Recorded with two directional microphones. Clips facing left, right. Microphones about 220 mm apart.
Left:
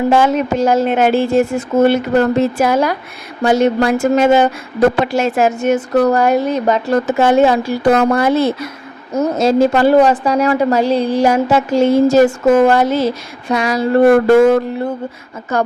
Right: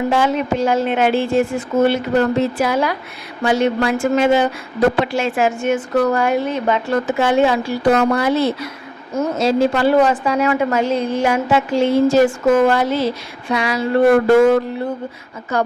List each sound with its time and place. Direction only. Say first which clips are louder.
0.1 s a woman's voice: left 4 dB; 45° left (ahead or behind)
9.1 s a woman's voice: left 4 dB; 40° left (ahead or behind)
15.5 s a woman's voice: left 2 dB; 45° left (ahead or behind)